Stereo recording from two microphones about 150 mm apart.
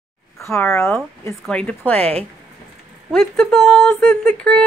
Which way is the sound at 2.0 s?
40° right (ahead or behind).